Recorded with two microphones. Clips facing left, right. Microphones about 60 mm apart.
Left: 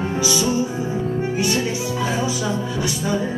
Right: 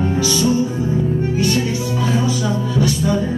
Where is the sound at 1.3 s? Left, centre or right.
Centre.